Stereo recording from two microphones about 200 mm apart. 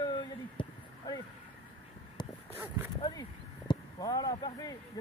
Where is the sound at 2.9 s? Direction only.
20° left (ahead or behind).